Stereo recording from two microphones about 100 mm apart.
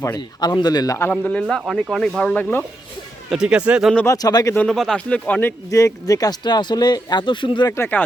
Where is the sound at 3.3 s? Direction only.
10° right (ahead or behind).